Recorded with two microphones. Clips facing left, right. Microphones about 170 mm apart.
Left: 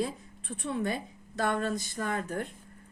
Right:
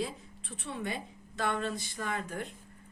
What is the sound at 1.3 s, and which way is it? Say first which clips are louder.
A woman's voice: left 3 dB; 50° left (ahead or behind).